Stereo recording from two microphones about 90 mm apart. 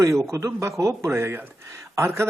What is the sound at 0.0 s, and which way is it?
Speech, 35° right (ahead or behind).